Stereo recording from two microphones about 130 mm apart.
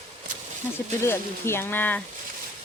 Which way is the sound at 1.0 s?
20° left (ahead or behind).